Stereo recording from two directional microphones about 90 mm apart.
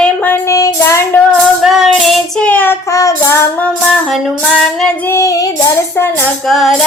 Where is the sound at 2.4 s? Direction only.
20° left (ahead or behind).